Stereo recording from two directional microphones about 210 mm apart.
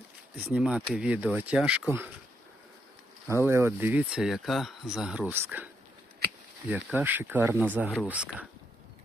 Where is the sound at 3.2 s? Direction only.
10° right (ahead or behind).